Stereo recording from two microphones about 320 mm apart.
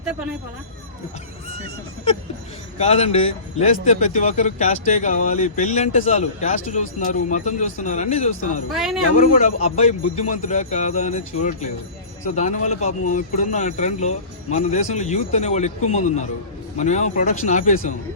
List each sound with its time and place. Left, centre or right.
2.7 s speech: centre
8.7 s speech: centre
9.1 s speech: centre